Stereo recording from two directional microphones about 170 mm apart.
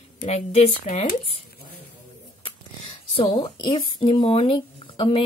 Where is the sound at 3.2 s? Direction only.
30° left (ahead or behind).